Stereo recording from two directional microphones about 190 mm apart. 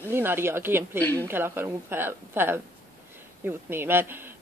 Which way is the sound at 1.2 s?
10° right (ahead or behind).